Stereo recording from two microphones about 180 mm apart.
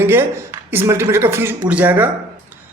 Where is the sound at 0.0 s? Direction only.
15° right (ahead or behind).